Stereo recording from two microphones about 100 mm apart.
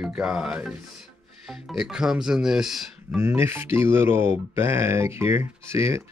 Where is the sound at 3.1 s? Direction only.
25° right (ahead or behind).